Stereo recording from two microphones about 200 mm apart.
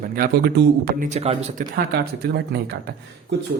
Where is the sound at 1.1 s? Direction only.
30° right (ahead or behind).